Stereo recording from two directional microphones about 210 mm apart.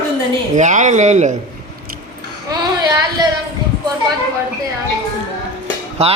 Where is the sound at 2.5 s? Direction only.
20° right (ahead or behind).